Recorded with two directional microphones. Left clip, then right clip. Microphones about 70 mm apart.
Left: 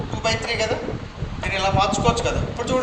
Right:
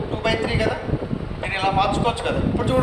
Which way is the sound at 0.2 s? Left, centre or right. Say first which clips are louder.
Even; left.